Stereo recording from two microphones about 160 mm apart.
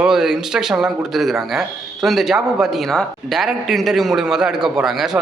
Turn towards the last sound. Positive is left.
turn(degrees=0)  # may be behind; listen again after turning